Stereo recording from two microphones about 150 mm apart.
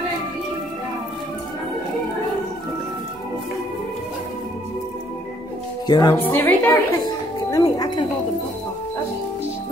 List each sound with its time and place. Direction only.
5.9 s speech: 30° left (ahead or behind)
6.1 s a woman's voice: 15° left (ahead or behind)
7.5 s wind chime: 25° left (ahead or behind)